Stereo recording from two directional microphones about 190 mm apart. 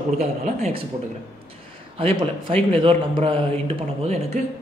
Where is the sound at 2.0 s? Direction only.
30° right (ahead or behind).